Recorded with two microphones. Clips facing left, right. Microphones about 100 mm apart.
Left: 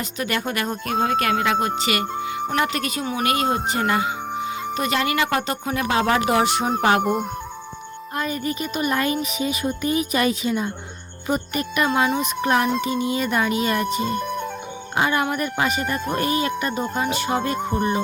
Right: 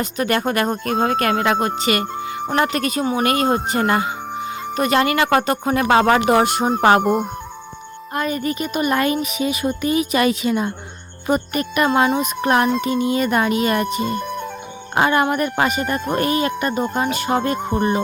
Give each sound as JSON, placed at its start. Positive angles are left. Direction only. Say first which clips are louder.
{"t": 0.0, "sound": "speech", "louder": "right 6 dB", "side_deg": -45}
{"t": 7.0, "sound": "speech", "louder": "right 4 dB", "side_deg": 0}
{"t": 8.1, "sound": "speech", "louder": "right 4 dB", "side_deg": -60}
{"t": 14.0, "sound": "music", "louder": "right 1 dB", "side_deg": 0}
{"t": 14.9, "sound": "speech", "louder": "right 5 dB", "side_deg": -55}